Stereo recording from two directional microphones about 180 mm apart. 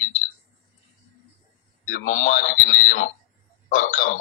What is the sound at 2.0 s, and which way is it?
A man's voice, 45° left (ahead or behind).